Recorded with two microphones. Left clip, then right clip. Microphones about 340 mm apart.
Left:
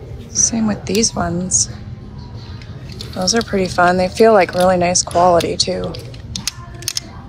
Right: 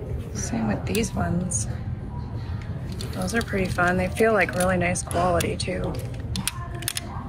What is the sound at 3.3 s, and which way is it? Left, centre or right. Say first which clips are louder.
Speech: left 9 dB; centre.